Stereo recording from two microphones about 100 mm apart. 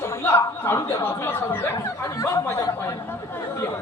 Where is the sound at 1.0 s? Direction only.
20° left (ahead or behind).